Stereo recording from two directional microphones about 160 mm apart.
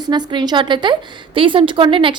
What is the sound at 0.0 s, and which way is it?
A woman's voice, 25° right (ahead or behind).